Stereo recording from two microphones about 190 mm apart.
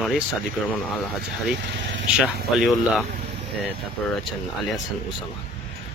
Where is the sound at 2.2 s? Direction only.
Centre (ahead or behind).